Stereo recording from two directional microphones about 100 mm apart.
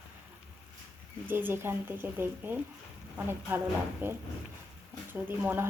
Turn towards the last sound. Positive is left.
turn(degrees=-20)  # may be behind; listen again after turning